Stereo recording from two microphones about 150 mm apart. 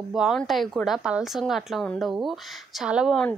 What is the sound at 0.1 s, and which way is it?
Speech, centre (ahead or behind).